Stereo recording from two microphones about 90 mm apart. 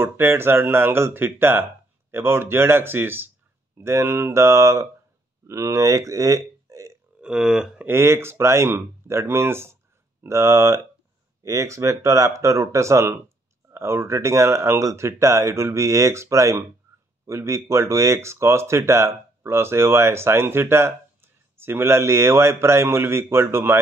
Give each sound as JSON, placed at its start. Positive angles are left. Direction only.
{"t": 0.0, "sound": "speech", "side_deg": -25}
{"t": 7.2, "sound": "speech", "side_deg": -10}
{"t": 7.8, "sound": "speech", "side_deg": -30}